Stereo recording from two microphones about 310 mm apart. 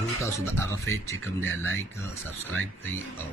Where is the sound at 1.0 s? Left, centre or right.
Centre.